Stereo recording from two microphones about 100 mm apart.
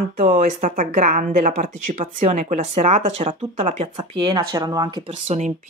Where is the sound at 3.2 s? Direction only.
75° right (ahead or behind); by 5.1 s 45° right (ahead or behind).